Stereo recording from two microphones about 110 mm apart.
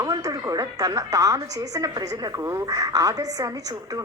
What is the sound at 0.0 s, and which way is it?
A woman's voice, 35° right (ahead or behind).